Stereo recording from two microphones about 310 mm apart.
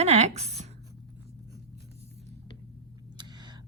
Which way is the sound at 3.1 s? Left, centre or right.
Centre.